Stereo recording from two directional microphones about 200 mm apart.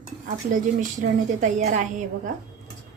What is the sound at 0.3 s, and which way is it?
A woman's voice, 40° right (ahead or behind).